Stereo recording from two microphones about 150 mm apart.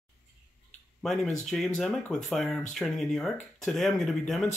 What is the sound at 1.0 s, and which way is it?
Speech, 5° left (ahead or behind).